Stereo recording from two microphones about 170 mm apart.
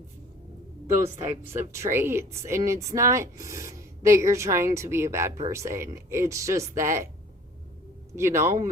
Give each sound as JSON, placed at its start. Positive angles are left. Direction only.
{"t": 1.2, "sound": "speech", "side_deg": -15}
{"t": 8.1, "sound": "speech", "side_deg": -15}